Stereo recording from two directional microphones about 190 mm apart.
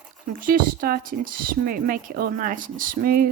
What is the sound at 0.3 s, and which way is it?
A woman's voice, 50° right (ahead or behind).